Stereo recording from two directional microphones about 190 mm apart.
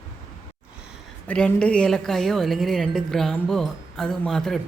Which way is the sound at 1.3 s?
5° left (ahead or behind).